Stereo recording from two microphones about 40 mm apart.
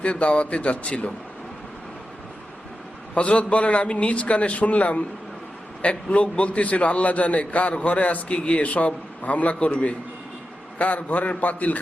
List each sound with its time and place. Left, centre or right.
0.0 s a man's voice: left
3.2 s a man's voice: left